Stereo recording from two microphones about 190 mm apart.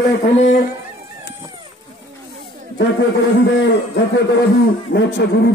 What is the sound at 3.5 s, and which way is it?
A man's voice, 70° left (ahead or behind).